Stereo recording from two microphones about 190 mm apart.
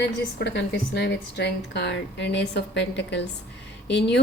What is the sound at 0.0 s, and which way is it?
A woman's voice, 65° left (ahead or behind).